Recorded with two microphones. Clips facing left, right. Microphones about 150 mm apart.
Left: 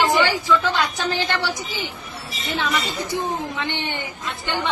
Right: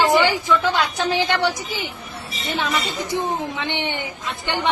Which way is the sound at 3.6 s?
20° right (ahead or behind).